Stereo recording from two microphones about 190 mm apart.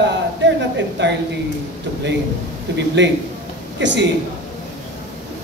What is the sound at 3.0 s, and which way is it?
Speech, 70° right (ahead or behind).